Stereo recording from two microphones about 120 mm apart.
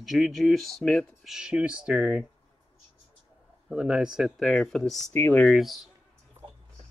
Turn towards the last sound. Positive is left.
turn(degrees=0)  # may be behind; listen again after turning